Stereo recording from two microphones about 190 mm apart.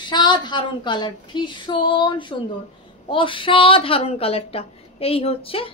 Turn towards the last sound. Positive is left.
turn(degrees=30)  # may be behind; listen again after turning